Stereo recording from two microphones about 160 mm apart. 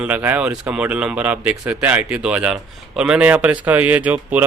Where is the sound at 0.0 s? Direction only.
10° right (ahead or behind).